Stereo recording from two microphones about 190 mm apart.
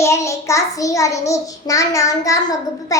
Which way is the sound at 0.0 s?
15° left (ahead or behind).